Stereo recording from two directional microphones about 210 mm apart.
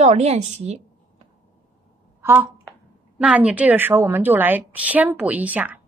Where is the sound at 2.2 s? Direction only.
10° right (ahead or behind).